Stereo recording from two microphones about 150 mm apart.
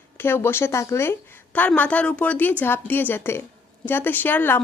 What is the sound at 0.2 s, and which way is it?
A woman's voice, 15° left (ahead or behind).